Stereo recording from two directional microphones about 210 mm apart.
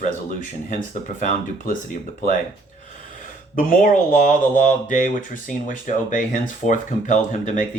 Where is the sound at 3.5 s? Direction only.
40° left (ahead or behind).